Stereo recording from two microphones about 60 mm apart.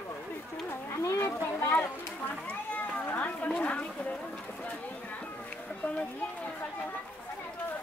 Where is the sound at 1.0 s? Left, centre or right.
Left.